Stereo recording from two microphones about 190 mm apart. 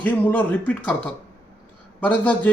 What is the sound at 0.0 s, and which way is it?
A man's voice, 10° left (ahead or behind).